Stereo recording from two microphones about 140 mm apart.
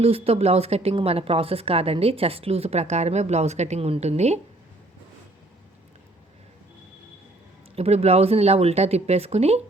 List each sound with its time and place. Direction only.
0.0 s speech: 45° right (ahead or behind)
7.8 s speech: 50° right (ahead or behind)